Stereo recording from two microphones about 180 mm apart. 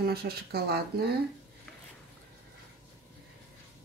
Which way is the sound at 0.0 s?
60° right (ahead or behind).